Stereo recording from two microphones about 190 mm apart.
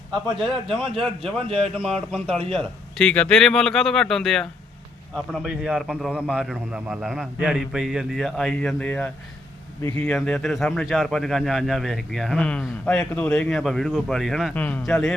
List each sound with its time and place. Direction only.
0.1 s speech: centre (ahead or behind)
1.2 s a man's voice: 30° right (ahead or behind)
2.1 s speech: centre (ahead or behind)